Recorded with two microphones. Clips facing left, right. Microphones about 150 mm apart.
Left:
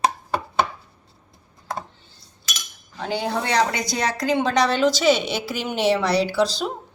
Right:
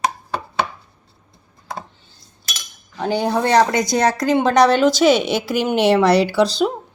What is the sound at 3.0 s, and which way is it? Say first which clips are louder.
Speech: right 6 dB; 45° right (ahead or behind).